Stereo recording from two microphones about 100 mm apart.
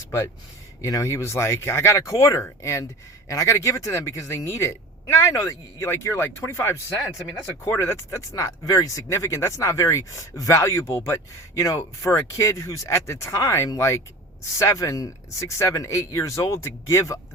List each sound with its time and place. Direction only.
0.8 s speech: 35° left (ahead or behind)